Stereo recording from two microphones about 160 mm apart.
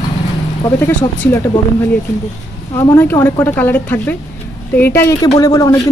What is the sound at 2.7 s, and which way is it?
A woman's voice, 15° left (ahead or behind).